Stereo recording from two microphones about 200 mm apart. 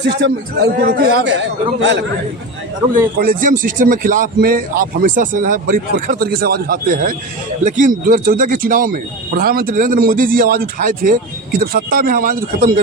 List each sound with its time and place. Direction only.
0.0 s a man's voice: 60° right (ahead or behind)
3.2 s speech: 45° right (ahead or behind)